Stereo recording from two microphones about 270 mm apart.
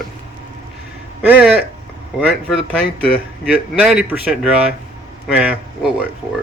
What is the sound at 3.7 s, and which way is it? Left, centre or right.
A man's voice, centre.